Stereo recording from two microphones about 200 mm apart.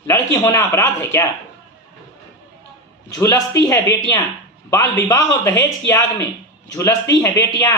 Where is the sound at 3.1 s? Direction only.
15° left (ahead or behind).